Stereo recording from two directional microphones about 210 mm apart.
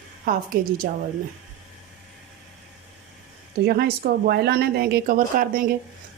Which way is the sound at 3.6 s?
50° right (ahead or behind).